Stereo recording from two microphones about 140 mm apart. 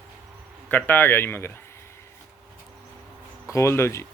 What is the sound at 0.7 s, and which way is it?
Speech, 15° left (ahead or behind).